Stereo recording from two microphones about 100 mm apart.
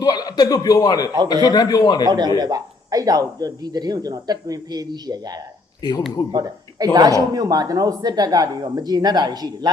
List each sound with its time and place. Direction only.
0.0 s a man's voice: 40° left (ahead or behind)
2.0 s speech: 45° right (ahead or behind)